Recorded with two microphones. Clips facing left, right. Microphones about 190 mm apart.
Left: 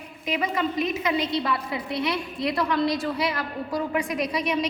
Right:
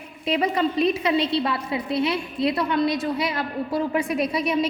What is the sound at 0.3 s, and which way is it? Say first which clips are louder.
A woman's voice: right 4 dB; 30° right (ahead or behind).